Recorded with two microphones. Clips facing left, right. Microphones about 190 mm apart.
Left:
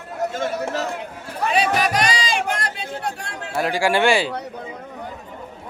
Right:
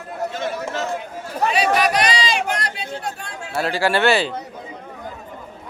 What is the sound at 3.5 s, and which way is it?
Speech, 15° left (ahead or behind).